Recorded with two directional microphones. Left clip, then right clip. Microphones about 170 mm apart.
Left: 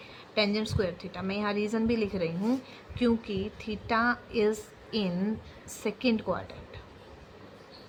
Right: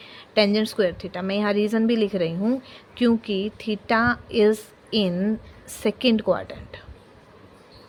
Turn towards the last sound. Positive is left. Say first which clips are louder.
# right 8 dB
turn(degrees=-50)  # may be behind; listen again after turning